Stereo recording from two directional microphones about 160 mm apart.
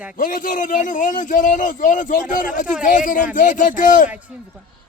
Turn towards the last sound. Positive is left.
turn(degrees=55)  # may be behind; listen again after turning